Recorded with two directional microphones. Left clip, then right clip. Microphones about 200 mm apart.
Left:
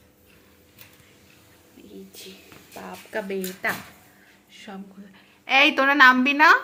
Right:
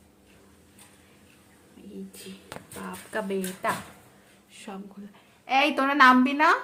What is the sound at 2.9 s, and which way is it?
Speech, 20° right (ahead or behind).